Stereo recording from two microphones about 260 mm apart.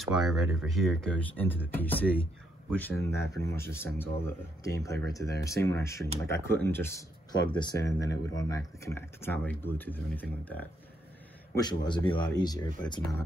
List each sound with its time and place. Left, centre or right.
0.0 s speech: centre